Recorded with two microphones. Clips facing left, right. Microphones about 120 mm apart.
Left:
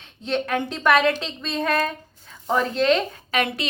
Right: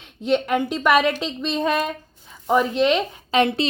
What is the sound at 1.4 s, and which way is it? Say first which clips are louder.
A woman's voice: right 1 dB; 20° right (ahead or behind).